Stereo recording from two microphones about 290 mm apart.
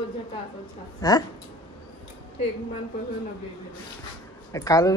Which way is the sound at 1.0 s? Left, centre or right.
Centre.